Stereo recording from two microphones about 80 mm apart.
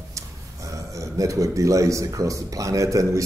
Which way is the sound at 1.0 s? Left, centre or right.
Right.